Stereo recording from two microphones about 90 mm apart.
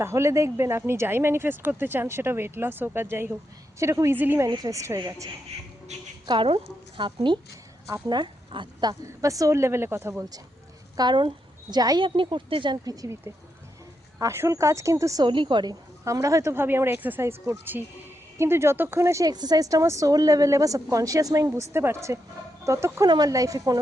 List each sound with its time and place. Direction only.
0.0 s a woman's voice: 30° right (ahead or behind)
4.4 s a woman's voice: 45° right (ahead or behind)
6.2 s a woman's voice: 65° right (ahead or behind)
8.0 s speech: 55° right (ahead or behind)
9.2 s a woman's voice: 40° right (ahead or behind)
10.9 s speech: 55° right (ahead or behind)
11.8 s speech: 45° right (ahead or behind)
12.0 s a woman's voice: 70° right (ahead or behind)
12.8 s speech: 40° right (ahead or behind)
14.2 s a woman's voice: 35° right (ahead or behind)
15.2 s a woman's voice: 65° right (ahead or behind)
16.0 s speech: 40° right (ahead or behind)
19.2 s a woman's voice: 50° right (ahead or behind); by 23.0 s 35° right (ahead or behind)
23.0 s speech: 50° right (ahead or behind)